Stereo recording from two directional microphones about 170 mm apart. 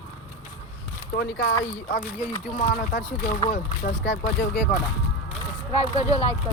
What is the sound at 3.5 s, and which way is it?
Speech, 75° left (ahead or behind).